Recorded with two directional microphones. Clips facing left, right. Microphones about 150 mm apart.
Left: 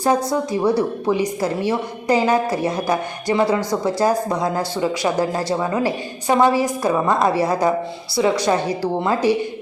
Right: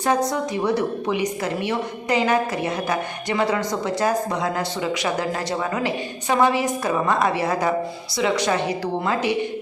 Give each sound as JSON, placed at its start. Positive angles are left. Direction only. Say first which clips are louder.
{"t": 1.1, "sound": "speech", "louder": "left 3 dB", "side_deg": 35}
{"t": 4.0, "sound": "speech", "louder": "left 2 dB", "side_deg": 30}